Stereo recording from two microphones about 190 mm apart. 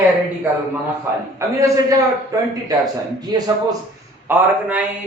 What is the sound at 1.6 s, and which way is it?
Speech, 15° right (ahead or behind).